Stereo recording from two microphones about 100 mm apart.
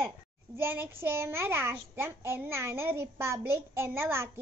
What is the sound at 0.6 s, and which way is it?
A child's voice, 25° right (ahead or behind).